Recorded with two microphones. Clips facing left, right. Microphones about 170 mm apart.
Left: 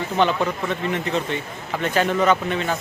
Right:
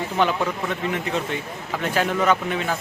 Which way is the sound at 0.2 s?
5° right (ahead or behind).